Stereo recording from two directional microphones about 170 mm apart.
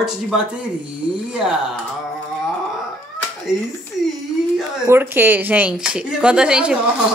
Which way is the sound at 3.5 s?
5° right (ahead or behind).